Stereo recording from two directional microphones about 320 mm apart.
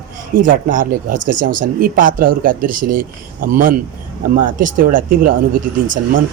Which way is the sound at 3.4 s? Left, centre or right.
Right.